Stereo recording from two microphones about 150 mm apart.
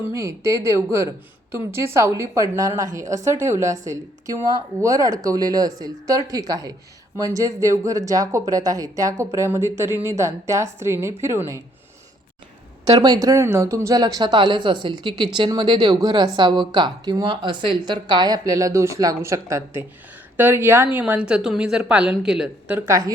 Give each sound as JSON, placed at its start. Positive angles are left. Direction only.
{"t": 0.1, "sound": "a woman's voice", "side_deg": -20}
{"t": 12.8, "sound": "a woman's voice", "side_deg": -25}
{"t": 22.9, "sound": "a woman's voice", "side_deg": -20}